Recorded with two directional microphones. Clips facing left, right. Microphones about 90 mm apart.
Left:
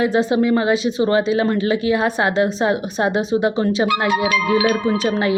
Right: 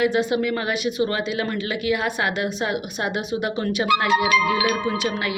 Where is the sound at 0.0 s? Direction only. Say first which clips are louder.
Left 4 dB; 30° left (ahead or behind).